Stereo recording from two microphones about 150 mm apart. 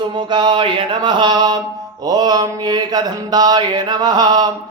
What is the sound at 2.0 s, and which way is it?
Mantra, 25° right (ahead or behind).